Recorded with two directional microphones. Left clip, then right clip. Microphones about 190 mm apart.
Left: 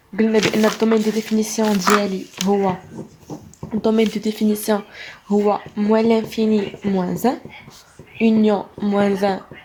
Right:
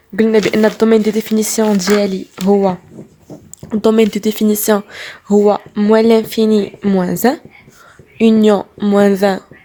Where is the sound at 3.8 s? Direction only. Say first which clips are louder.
Right 7 dB; 50° right (ahead or behind).